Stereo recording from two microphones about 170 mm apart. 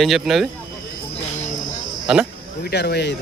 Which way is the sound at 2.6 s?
75° left (ahead or behind).